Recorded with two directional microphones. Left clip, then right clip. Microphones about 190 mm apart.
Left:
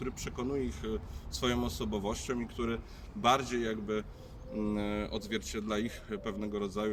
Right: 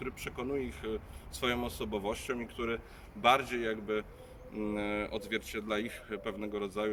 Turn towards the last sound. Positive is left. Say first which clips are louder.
# even
turn(degrees=10)  # may be behind; listen again after turning